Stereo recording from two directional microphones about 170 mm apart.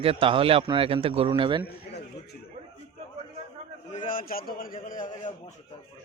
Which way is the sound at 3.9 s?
50° left (ahead or behind).